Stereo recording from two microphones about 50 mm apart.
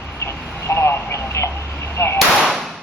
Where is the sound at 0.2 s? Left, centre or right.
Left.